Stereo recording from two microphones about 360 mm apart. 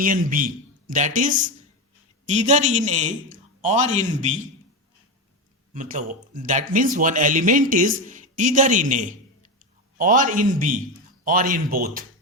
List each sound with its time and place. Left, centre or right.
0.0 s speech: right
5.7 s speech: right